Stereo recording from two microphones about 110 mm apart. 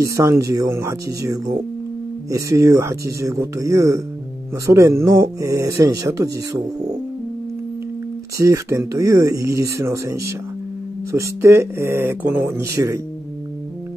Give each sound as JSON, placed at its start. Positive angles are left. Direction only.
{"t": 0.0, "sound": "speech", "side_deg": -25}
{"t": 8.4, "sound": "speech", "side_deg": -30}